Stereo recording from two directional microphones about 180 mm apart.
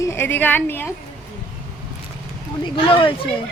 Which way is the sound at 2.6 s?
30° left (ahead or behind).